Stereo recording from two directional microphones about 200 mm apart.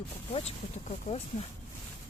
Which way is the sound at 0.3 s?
30° left (ahead or behind).